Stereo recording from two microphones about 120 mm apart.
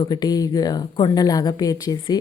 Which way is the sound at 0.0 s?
35° left (ahead or behind).